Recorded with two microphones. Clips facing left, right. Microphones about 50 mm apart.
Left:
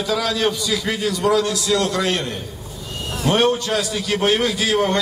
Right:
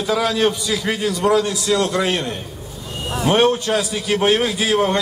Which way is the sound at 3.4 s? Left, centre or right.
Centre.